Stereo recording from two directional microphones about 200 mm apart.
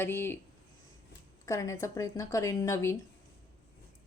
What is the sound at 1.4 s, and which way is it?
A woman's voice, 15° left (ahead or behind).